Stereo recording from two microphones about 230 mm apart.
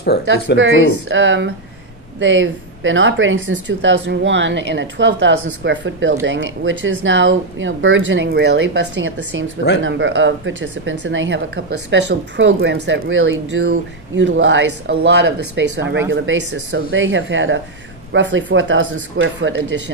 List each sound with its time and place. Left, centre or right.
0.0 s speech: left
0.6 s speech: right